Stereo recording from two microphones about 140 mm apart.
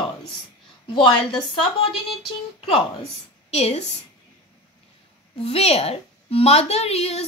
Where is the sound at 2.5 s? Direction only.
40° left (ahead or behind).